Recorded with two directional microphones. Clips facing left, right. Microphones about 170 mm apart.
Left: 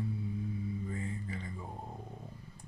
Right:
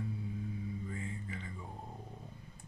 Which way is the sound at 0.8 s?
35° left (ahead or behind).